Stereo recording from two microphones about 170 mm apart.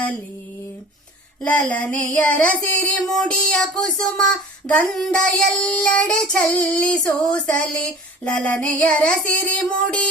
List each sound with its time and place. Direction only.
1.4 s child singing: 10° left (ahead or behind)